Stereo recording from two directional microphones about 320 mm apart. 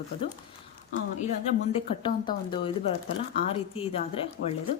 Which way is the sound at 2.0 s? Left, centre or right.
Centre.